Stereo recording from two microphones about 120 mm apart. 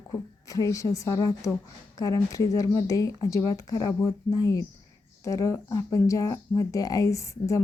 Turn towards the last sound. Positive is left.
turn(degrees=25)  # may be behind; listen again after turning